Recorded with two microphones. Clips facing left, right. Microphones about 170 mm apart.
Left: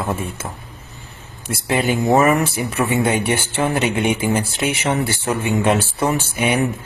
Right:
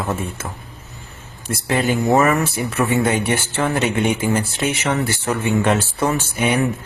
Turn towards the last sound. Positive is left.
turn(degrees=10)  # may be behind; listen again after turning